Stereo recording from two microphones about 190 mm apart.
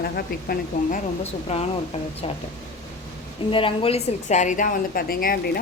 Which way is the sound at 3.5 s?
30° left (ahead or behind).